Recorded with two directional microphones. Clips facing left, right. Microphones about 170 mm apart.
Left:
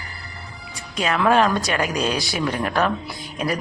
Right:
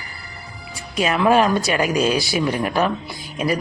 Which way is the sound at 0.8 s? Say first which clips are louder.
Right 2 dB; 5° right (ahead or behind).